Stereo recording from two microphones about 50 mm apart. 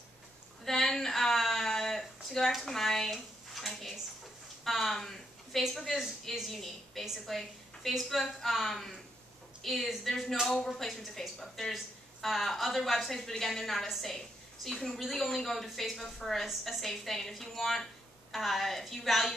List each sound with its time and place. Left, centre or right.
0.7 s a sound: centre
2.6 s speech: centre
3.1 s dishes: centre
4.6 s speech: centre